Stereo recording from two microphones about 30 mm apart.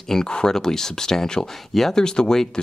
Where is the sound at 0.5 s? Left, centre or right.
Centre.